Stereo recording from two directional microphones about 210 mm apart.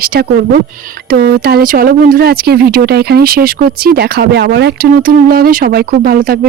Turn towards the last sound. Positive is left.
turn(degrees=-45)  # may be behind; listen again after turning